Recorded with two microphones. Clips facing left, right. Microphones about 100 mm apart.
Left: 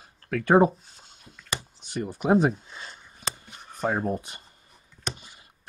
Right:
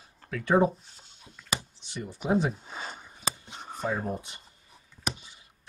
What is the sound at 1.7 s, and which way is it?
Speech, 50° left (ahead or behind).